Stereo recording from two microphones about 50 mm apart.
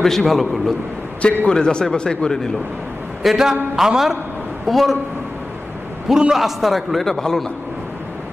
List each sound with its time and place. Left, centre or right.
0.0 s a man's voice: centre
1.4 s speech: centre
3.2 s a man's voice: centre
6.0 s a man's voice: centre